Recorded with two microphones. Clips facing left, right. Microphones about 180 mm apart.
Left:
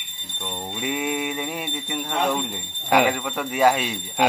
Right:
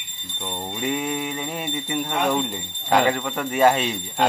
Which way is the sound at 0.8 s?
5° left (ahead or behind).